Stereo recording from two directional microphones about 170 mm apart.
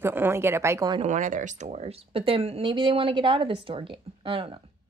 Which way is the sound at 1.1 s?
50° right (ahead or behind).